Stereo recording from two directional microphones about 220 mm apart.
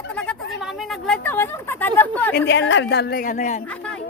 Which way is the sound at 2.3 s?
50° left (ahead or behind).